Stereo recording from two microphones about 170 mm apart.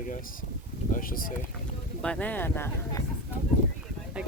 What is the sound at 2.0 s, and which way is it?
Speech, 5° left (ahead or behind).